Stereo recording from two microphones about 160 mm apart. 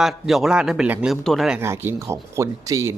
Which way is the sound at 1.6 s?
15° right (ahead or behind).